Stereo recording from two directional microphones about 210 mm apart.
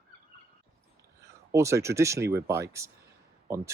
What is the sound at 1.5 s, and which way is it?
Speech, 15° right (ahead or behind).